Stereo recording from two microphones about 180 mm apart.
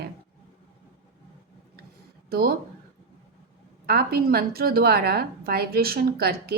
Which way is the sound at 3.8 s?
60° right (ahead or behind).